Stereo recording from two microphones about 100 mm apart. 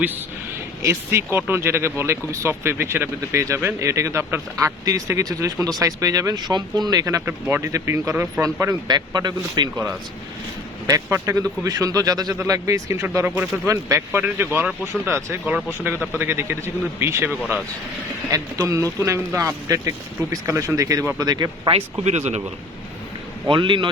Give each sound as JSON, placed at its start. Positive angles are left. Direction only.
{"t": 0.8, "sound": "speech", "side_deg": -25}
{"t": 7.3, "sound": "speech", "side_deg": -25}
{"t": 8.9, "sound": "speech", "side_deg": -45}
{"t": 10.8, "sound": "speech", "side_deg": -35}
{"t": 18.3, "sound": "speech", "side_deg": -35}
{"t": 23.5, "sound": "a man's voice", "side_deg": -55}